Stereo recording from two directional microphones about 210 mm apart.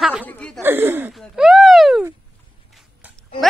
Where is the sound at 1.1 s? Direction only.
Centre (ahead or behind).